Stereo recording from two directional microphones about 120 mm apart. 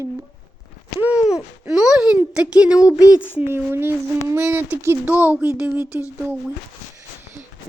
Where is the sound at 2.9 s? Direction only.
25° left (ahead or behind).